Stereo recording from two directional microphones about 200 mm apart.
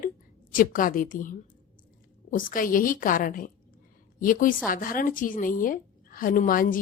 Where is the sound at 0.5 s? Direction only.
45° left (ahead or behind).